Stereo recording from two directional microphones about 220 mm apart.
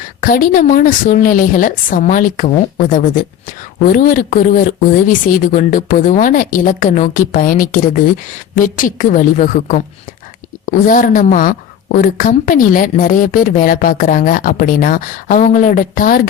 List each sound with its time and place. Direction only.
0.2 s a woman's voice: 40° left (ahead or behind)